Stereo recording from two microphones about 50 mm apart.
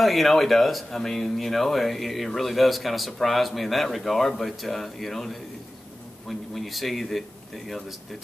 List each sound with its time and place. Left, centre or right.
0.0 s speech: centre